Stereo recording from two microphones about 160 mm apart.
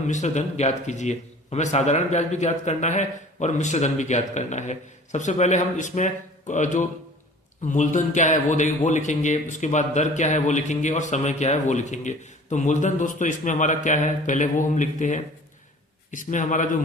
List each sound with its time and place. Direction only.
0.1 s speech: 45° left (ahead or behind)